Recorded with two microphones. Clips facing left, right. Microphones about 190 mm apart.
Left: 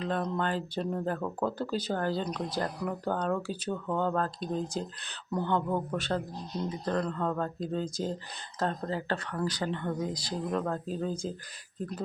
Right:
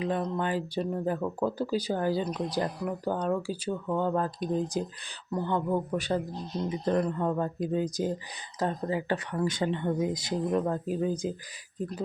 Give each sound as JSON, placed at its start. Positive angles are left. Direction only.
{"t": 0.0, "sound": "speech", "side_deg": -10}